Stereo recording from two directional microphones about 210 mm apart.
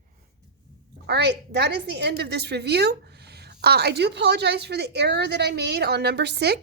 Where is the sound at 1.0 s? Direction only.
50° right (ahead or behind).